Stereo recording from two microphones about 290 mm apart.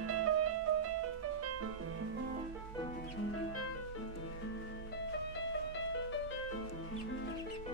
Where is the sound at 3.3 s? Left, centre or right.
Left.